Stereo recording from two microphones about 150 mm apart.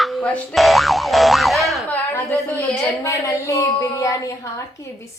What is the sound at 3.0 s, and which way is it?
A woman's voice, 20° left (ahead or behind).